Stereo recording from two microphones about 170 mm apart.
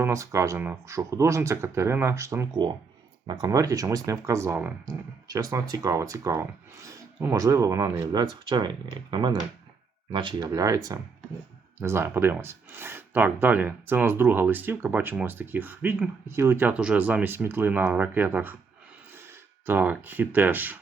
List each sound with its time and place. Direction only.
0.0 s speech: 15° right (ahead or behind)
11.8 s speech: 15° right (ahead or behind)